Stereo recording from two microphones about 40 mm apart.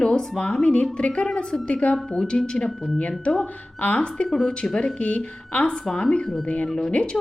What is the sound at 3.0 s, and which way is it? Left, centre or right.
A woman's voice, left.